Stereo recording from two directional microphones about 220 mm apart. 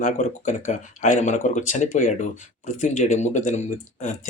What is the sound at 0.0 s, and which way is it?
Speech, 35° left (ahead or behind).